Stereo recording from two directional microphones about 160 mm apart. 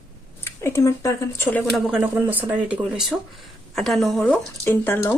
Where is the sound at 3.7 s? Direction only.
Centre (ahead or behind).